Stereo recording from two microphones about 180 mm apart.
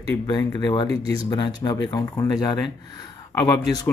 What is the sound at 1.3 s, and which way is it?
Speech, 25° left (ahead or behind).